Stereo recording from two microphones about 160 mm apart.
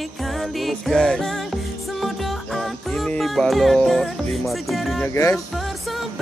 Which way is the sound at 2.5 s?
Centre (ahead or behind).